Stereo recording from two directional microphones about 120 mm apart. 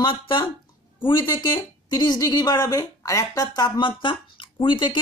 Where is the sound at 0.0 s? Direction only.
40° left (ahead or behind).